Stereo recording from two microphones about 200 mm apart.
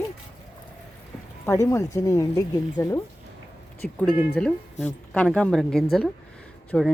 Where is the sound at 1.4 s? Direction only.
15° left (ahead or behind).